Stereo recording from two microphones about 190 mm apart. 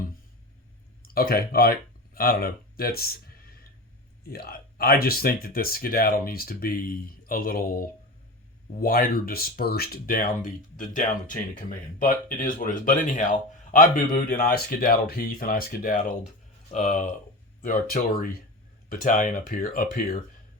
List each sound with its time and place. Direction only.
1.0 s speech: 50° left (ahead or behind)
2.1 s a sound: 50° left (ahead or behind)
4.2 s speech: 55° left (ahead or behind); by 17.0 s 35° left (ahead or behind)
17.6 s speech: 50° left (ahead or behind)